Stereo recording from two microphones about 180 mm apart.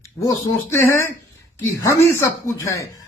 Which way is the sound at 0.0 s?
15° left (ahead or behind).